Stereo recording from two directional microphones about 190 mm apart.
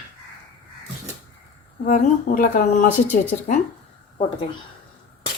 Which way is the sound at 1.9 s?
45° left (ahead or behind).